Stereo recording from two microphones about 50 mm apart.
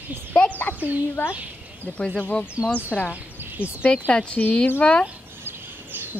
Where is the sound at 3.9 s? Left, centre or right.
Left.